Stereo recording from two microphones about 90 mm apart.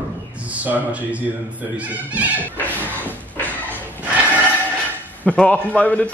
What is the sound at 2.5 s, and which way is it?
Music, 20° left (ahead or behind).